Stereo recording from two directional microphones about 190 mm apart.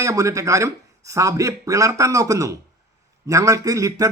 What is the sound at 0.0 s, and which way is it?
A man's voice, 15° right (ahead or behind).